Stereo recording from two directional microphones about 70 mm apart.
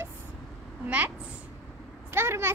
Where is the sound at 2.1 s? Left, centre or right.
Right.